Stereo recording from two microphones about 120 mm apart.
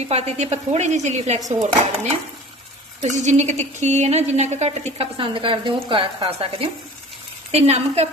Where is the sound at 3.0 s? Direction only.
85° right; by 4.7 s 70° right (ahead or behind).